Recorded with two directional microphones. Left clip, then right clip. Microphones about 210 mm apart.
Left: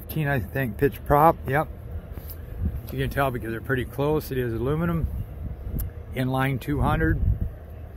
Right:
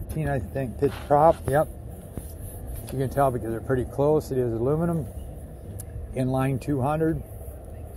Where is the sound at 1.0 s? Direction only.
60° left (ahead or behind).